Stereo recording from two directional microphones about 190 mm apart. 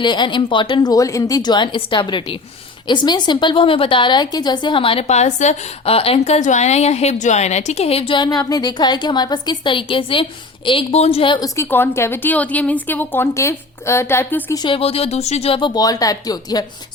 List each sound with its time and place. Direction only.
0.0 s a woman's voice: 25° left (ahead or behind); by 14.6 s 10° left (ahead or behind)
14.6 s a woman's voice: 30° left (ahead or behind)